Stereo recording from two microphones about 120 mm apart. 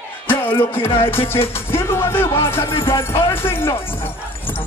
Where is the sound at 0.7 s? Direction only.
50° left (ahead or behind).